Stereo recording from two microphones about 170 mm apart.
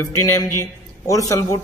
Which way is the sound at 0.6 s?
20° left (ahead or behind).